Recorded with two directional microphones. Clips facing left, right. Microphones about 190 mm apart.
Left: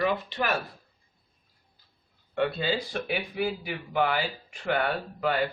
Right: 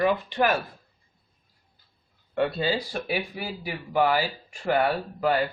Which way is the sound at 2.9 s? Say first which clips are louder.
Right 1 dB; 40° right (ahead or behind).